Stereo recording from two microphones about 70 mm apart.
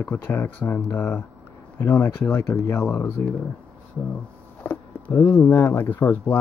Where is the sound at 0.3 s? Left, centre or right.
Left.